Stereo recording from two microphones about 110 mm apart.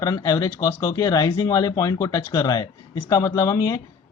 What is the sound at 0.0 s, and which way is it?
Speech, 30° left (ahead or behind).